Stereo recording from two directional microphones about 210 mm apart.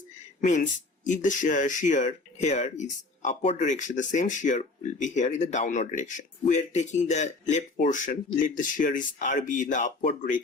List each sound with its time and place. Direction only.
0.4 s speech: 35° left (ahead or behind)